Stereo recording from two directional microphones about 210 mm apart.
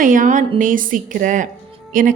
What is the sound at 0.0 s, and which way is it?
Speech, 40° right (ahead or behind).